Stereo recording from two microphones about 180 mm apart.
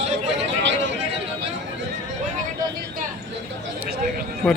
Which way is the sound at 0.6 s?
90° right.